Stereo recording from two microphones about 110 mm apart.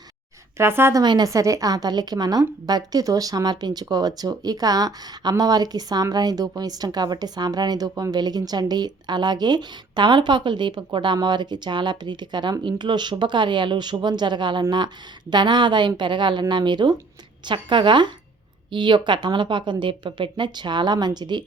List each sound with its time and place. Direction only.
0.5 s speech: 20° right (ahead or behind)
0.9 s a woman's voice: 40° right (ahead or behind)